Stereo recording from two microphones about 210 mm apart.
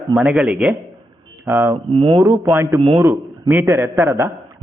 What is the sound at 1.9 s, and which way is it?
Speech, 25° right (ahead or behind).